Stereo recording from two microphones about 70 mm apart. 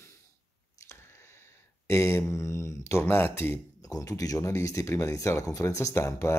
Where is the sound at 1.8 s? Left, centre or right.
Left.